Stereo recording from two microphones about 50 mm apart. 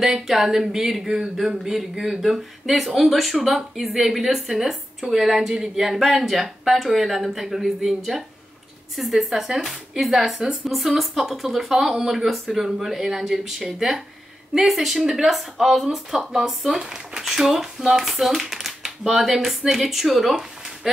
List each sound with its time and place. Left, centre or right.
0.0 s a woman's voice: centre